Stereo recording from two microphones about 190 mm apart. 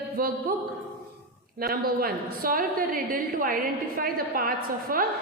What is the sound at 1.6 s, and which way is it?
A woman's voice, 55° right (ahead or behind).